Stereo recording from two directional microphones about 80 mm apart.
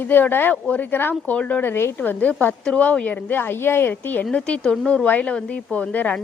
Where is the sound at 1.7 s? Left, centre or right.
Left; by 5.0 s centre.